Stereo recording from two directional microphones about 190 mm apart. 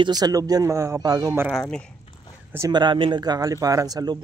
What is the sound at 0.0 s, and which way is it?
Speech, 20° right (ahead or behind).